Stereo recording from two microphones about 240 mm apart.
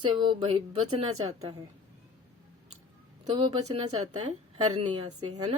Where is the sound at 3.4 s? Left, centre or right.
Centre.